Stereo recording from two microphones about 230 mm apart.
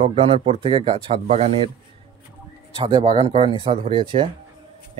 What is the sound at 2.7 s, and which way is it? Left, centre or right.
Speech, right.